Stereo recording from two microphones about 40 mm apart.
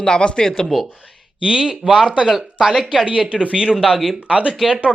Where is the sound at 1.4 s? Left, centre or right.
Right.